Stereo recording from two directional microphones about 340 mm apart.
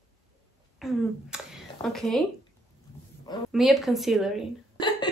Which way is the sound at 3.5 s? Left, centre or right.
Centre.